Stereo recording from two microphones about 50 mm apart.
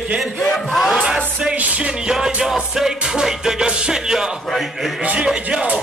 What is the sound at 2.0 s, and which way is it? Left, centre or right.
Music, centre.